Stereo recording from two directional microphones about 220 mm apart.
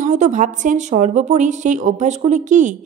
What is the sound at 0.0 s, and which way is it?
A woman's voice, 35° right (ahead or behind).